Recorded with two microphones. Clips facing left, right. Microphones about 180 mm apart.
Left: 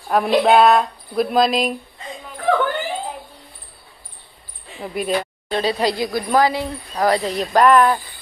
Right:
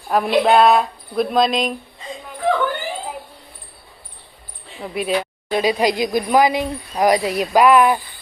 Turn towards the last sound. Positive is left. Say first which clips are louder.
# right 1 dB
turn(degrees=-10)  # may be behind; listen again after turning